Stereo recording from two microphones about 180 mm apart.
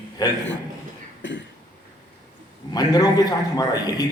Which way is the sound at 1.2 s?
90° left.